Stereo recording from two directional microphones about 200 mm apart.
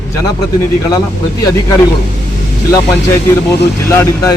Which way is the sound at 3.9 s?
10° left (ahead or behind).